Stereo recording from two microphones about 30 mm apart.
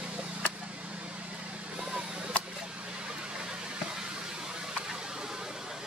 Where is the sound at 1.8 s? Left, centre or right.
Right.